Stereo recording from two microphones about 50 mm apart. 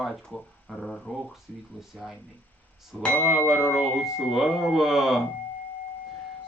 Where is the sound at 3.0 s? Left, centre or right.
Left.